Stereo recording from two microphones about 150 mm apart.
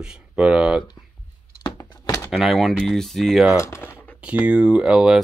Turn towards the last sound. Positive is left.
turn(degrees=-5)  # may be behind; listen again after turning